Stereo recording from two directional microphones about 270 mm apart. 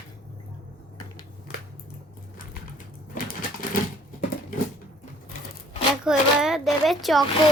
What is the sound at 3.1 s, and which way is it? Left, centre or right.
Sewing machine, left.